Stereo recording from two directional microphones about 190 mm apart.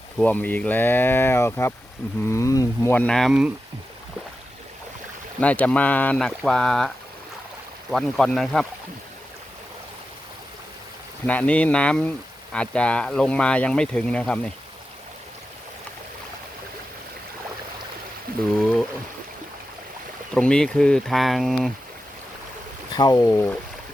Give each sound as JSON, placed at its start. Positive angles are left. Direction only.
{"t": 0.2, "sound": "speech", "side_deg": 10}
{"t": 5.4, "sound": "speech", "side_deg": 5}
{"t": 11.3, "sound": "speech", "side_deg": 5}
{"t": 18.5, "sound": "speech", "side_deg": 5}
{"t": 20.3, "sound": "speech", "side_deg": 5}
{"t": 22.9, "sound": "speech", "side_deg": 20}